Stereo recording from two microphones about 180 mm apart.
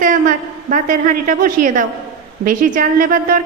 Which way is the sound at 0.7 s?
45° right (ahead or behind).